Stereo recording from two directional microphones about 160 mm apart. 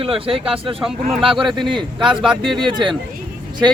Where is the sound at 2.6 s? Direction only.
30° right (ahead or behind).